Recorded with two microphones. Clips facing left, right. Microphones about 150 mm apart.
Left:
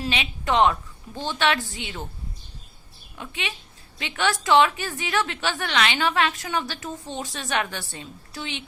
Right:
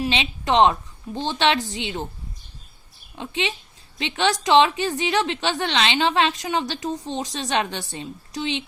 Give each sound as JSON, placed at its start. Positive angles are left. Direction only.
{"t": 0.0, "sound": "a woman's voice", "side_deg": -25}
{"t": 3.2, "sound": "a woman's voice", "side_deg": -25}